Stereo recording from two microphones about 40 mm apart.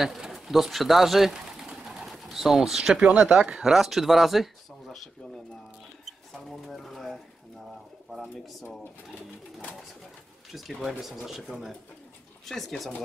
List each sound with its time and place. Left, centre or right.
0.0 s speech: centre
1.3 s pigeon: centre
2.3 s speech: centre
3.0 s speech: right
3.6 s speech: centre
6.4 s speech: centre
6.7 s pigeon: centre
8.1 s speech: centre
10.5 s speech: centre
12.4 s speech: centre